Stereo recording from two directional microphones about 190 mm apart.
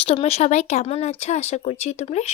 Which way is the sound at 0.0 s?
30° left (ahead or behind).